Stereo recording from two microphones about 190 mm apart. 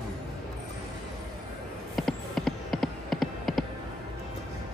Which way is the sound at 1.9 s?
Centre (ahead or behind).